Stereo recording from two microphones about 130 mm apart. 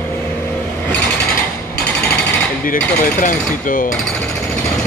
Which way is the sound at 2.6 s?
90° left.